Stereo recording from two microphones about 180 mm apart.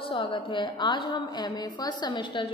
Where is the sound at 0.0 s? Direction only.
30° left (ahead or behind).